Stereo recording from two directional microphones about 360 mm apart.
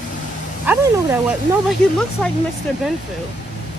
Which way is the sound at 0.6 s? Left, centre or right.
Centre.